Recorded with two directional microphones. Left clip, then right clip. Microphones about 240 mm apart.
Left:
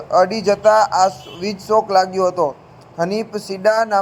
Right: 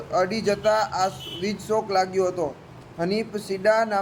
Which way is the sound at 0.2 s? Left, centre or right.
Centre.